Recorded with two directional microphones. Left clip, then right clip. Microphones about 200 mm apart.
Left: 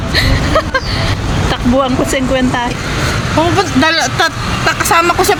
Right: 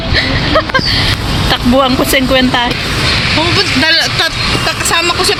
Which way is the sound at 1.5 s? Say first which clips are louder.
Right 3 dB; 5° right (ahead or behind).